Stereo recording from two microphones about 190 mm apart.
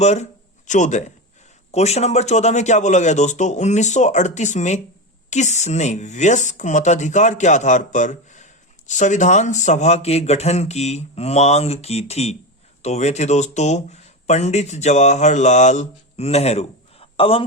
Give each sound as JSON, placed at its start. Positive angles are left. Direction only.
{"t": 0.0, "sound": "speech", "side_deg": 35}